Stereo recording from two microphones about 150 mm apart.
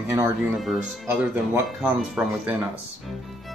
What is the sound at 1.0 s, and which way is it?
Speech, 15° right (ahead or behind).